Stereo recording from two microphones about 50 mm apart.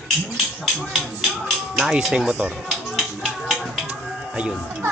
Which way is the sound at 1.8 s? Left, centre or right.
Centre.